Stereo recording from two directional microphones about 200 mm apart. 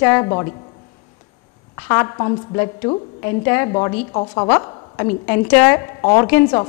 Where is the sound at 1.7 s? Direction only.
15° left (ahead or behind).